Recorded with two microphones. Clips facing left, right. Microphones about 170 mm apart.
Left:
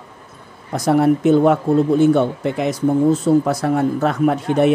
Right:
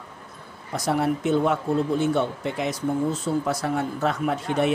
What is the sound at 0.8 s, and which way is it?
Speech, 50° left (ahead or behind).